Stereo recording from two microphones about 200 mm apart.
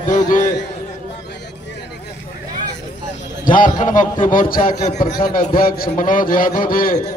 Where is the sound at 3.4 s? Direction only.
40° left (ahead or behind).